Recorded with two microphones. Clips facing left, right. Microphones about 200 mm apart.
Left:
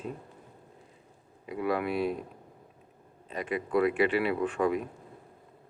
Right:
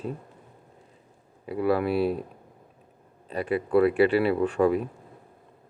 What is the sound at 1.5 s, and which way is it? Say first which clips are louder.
Speech: right 6 dB; 35° right (ahead or behind).